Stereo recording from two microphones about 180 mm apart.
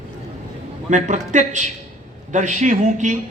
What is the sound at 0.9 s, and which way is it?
A man's voice, 40° right (ahead or behind).